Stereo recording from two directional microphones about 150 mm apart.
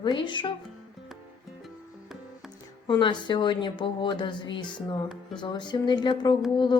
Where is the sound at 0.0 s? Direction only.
35° left (ahead or behind).